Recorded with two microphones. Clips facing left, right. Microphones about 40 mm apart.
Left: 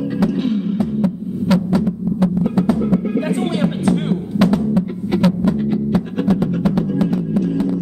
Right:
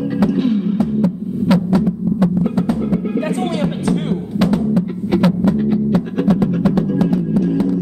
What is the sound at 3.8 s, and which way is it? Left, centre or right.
Music, centre.